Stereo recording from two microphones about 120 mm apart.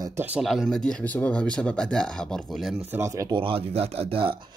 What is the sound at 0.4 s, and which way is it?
Speech, centre (ahead or behind).